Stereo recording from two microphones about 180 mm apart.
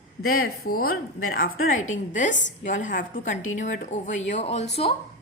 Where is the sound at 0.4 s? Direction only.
60° left (ahead or behind).